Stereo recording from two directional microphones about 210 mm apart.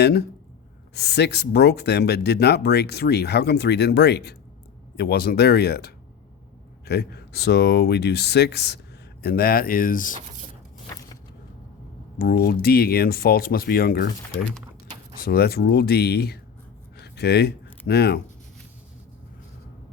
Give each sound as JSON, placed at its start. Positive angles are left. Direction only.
{"t": 0.0, "sound": "speech", "side_deg": 50}
{"t": 12.2, "sound": "speech", "side_deg": 45}
{"t": 15.2, "sound": "speech", "side_deg": 45}
{"t": 17.0, "sound": "a sound", "side_deg": 50}